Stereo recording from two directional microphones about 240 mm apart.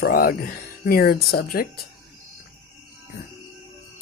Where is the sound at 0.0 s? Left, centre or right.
Left.